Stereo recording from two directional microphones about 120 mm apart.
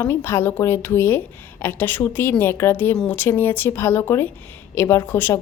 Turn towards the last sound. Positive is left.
turn(degrees=20)  # may be behind; listen again after turning